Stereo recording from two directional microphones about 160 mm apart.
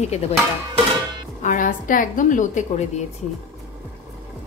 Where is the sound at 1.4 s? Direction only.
55° left (ahead or behind).